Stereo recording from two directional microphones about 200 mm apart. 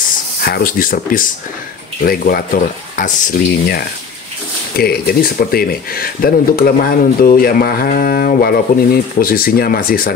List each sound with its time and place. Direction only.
0.4 s speech: 45° left (ahead or behind)